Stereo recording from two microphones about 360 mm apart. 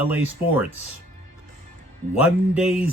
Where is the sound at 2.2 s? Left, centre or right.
Centre.